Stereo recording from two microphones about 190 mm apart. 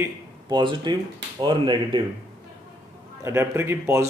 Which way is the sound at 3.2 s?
15° right (ahead or behind).